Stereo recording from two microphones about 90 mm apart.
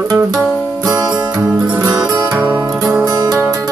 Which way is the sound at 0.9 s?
50° right (ahead or behind).